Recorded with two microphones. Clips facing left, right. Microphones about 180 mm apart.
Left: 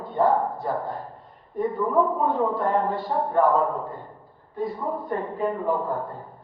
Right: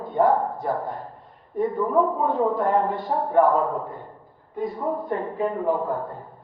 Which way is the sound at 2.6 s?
20° right (ahead or behind).